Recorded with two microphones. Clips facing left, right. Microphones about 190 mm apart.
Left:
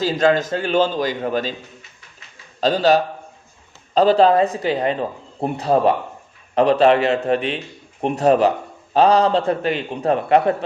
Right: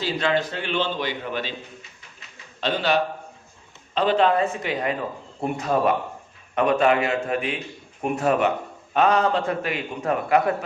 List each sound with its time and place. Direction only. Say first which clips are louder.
0.0 s a man's voice: left 6 dB; 45° left (ahead or behind)
2.6 s a man's voice: left 6 dB; 40° left (ahead or behind)